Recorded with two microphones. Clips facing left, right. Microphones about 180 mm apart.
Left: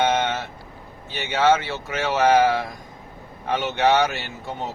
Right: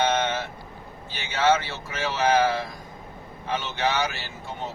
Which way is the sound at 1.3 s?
65° left (ahead or behind).